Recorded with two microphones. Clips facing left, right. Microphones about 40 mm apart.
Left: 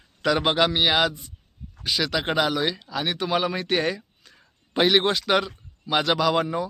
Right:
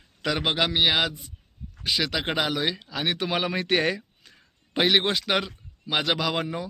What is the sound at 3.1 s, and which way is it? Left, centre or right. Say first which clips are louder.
Speech: left 3 dB; right.